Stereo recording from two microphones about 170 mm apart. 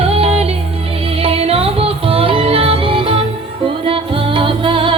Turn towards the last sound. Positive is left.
turn(degrees=-30)  # may be behind; listen again after turning